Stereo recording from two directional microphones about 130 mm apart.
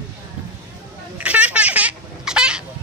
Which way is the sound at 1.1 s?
10° right (ahead or behind).